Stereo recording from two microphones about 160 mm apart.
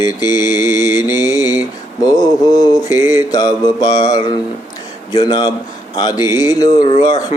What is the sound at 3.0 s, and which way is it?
Mantra, 15° right (ahead or behind).